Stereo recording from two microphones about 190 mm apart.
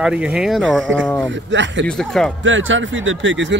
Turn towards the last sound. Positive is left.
turn(degrees=-75)  # may be behind; listen again after turning